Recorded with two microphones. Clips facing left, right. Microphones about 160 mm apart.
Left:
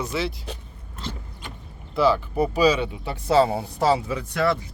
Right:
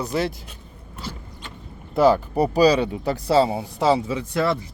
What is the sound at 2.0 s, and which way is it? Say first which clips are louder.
Speech: right 3 dB; 40° right (ahead or behind).